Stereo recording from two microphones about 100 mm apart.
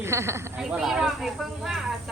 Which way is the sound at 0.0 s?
25° right (ahead or behind).